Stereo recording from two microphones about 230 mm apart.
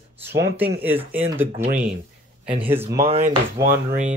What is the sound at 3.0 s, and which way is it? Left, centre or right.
Speech, right.